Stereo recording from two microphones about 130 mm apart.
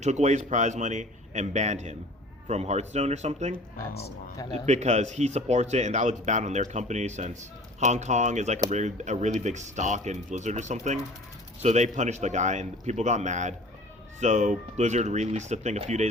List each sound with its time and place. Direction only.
0.0 s speech: 65° right (ahead or behind)
4.5 s speech: 60° right (ahead or behind)